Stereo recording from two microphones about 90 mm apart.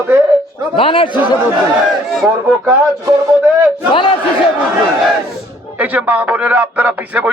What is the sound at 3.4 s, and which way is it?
Speech, 15° right (ahead or behind).